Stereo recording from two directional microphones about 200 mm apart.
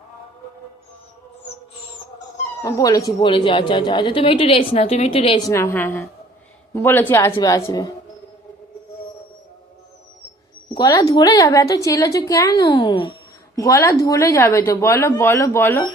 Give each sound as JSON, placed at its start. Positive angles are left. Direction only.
{"t": 2.6, "sound": "a woman's voice", "side_deg": 15}
{"t": 5.5, "sound": "a woman's voice", "side_deg": 15}
{"t": 10.8, "sound": "a woman's voice", "side_deg": 20}